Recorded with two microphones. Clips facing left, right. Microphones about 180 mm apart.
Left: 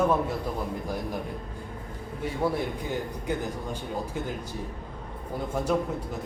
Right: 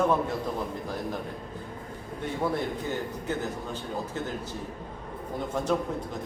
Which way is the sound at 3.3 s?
15° left (ahead or behind).